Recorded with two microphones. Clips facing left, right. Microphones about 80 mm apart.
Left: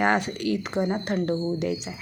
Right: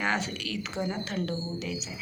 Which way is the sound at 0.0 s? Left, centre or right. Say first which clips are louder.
Left 7 dB; left.